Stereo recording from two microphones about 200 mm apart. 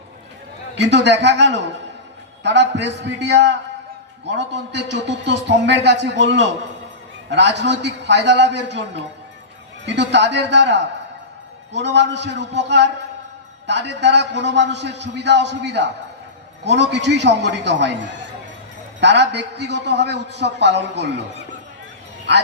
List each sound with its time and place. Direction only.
0.8 s a man's voice: 60° right (ahead or behind)